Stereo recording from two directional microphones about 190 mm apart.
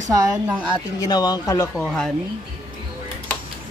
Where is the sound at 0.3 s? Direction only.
5° right (ahead or behind).